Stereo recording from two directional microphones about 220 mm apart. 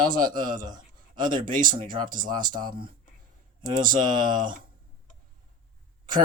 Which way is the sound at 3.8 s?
40° right (ahead or behind).